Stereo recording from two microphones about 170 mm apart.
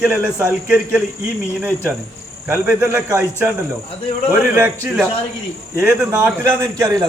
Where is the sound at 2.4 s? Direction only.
15° right (ahead or behind).